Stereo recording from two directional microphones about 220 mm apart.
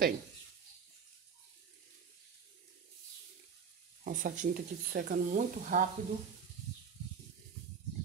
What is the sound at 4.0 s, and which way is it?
Speech, 35° right (ahead or behind).